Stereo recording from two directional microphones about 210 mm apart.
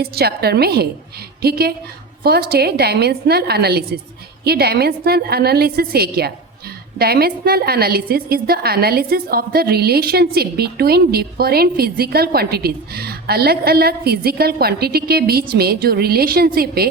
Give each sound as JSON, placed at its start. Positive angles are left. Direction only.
{"t": 0.0, "sound": "a woman's voice", "side_deg": -50}